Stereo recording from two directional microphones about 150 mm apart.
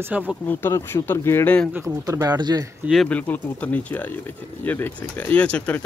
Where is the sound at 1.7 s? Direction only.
20° right (ahead or behind).